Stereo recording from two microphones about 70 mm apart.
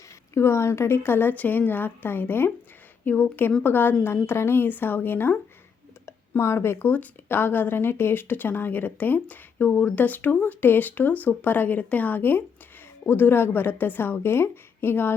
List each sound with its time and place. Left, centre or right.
0.3 s a woman's voice: left
6.8 s a woman's voice: left